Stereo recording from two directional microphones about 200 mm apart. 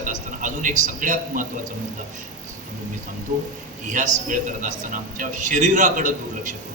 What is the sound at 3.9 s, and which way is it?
A man's voice, 40° right (ahead or behind).